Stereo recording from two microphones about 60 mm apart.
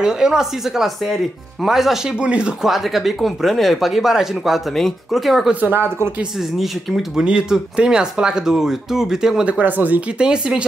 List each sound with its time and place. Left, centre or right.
0.0 s speech: centre
2.1 s speech: centre
2.6 s speech: centre
5.5 s speech: right
6.6 s speech: centre
9.5 s speech: right
10.1 s speech: centre